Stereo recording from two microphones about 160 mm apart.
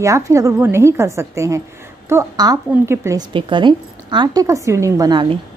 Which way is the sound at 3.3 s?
30° right (ahead or behind).